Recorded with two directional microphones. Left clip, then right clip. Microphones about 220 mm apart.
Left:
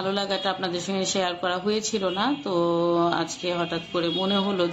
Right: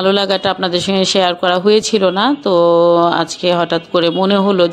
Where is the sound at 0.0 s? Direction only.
40° right (ahead or behind).